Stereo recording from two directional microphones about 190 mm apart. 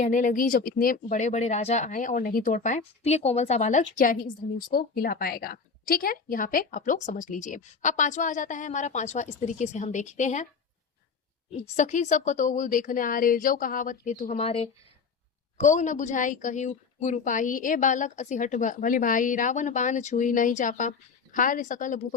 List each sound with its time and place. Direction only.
0.0 s a woman's voice: 40° left (ahead or behind)
11.8 s a woman's voice: 40° left (ahead or behind)